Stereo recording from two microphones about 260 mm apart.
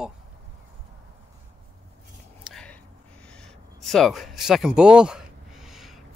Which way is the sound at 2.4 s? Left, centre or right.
Centre.